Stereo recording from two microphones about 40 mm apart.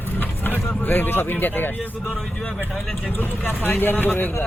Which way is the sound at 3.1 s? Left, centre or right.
Left.